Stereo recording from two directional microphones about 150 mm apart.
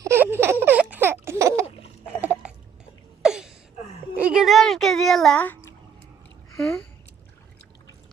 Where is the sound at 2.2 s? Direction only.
10° right (ahead or behind).